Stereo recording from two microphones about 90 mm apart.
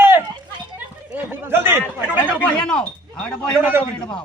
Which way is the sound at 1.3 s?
25° right (ahead or behind).